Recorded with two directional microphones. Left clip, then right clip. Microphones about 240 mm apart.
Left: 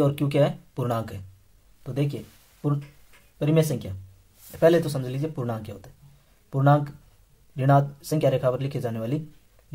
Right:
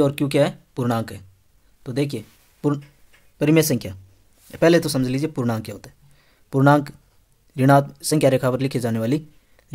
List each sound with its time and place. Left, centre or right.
0.0 s speech: right